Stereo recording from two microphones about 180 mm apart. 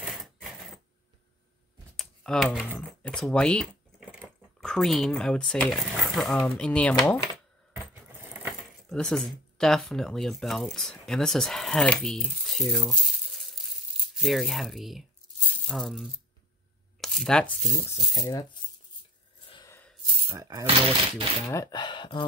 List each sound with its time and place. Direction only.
0.0 s sewing machine: centre (ahead or behind)
2.0 s computer keyboard: 5° left (ahead or behind)
3.0 s speech: 5° left (ahead or behind)
7.7 s keys jangling: 15° right (ahead or behind)
8.8 s speech: 5° left (ahead or behind)
15.4 s a sound: centre (ahead or behind)
17.0 s speech: centre (ahead or behind)
18.2 s speech: 20° left (ahead or behind)
19.5 s a sound: 20° left (ahead or behind)
20.3 s speech: 20° right (ahead or behind)
20.6 s speech: 30° right (ahead or behind)
21.5 s speech: 20° left (ahead or behind)